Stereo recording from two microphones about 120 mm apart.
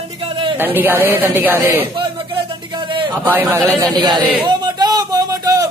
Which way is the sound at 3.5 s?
35° right (ahead or behind).